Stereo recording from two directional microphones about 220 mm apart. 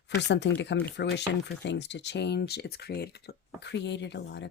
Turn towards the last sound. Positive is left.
turn(degrees=50)  # may be behind; listen again after turning